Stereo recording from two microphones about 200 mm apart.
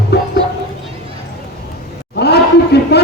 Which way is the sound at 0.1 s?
55° left (ahead or behind).